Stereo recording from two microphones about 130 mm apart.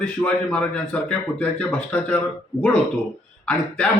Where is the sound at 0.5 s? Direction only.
10° left (ahead or behind).